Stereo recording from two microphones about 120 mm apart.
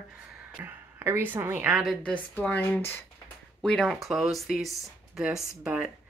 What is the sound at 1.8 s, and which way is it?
Speech, centre (ahead or behind).